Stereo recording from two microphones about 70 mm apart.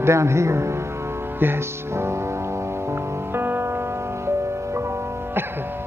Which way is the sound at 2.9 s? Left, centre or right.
Right.